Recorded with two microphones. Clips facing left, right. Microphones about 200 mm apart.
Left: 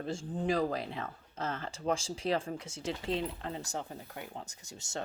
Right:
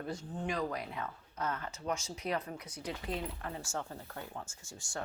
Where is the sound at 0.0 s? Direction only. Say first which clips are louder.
Left 4 dB; 30° left (ahead or behind).